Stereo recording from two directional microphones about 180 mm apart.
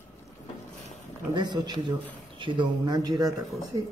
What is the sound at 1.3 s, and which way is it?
Speech, 25° right (ahead or behind).